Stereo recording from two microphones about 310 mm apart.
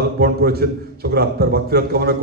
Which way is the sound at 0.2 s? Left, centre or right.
Right.